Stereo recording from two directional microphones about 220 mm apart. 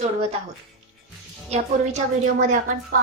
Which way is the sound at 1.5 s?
30° right (ahead or behind).